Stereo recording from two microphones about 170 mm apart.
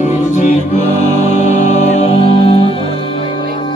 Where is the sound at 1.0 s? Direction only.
40° left (ahead or behind).